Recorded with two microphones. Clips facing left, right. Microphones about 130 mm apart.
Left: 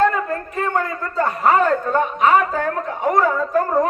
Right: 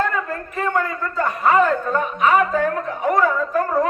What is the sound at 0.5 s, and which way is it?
A man's voice, 30° left (ahead or behind).